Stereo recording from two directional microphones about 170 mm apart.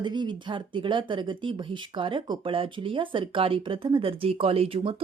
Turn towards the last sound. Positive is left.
turn(degrees=-35)  # may be behind; listen again after turning